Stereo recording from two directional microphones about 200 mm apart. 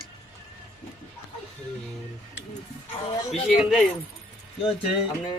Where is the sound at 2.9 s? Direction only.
30° left (ahead or behind).